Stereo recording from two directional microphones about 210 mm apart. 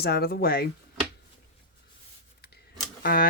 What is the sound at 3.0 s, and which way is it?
Speech, 45° left (ahead or behind).